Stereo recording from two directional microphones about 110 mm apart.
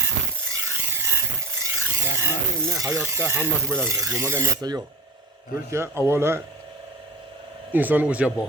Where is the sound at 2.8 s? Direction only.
25° right (ahead or behind).